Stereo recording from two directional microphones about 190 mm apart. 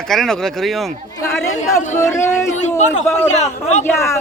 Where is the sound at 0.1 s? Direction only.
Centre (ahead or behind).